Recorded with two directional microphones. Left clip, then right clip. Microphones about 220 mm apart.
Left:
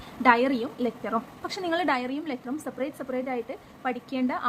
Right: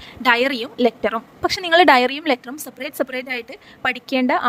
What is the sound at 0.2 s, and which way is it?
A woman's voice, 40° right (ahead or behind).